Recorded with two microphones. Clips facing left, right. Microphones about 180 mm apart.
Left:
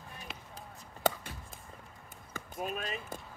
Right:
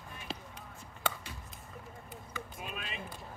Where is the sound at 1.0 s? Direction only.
40° left (ahead or behind).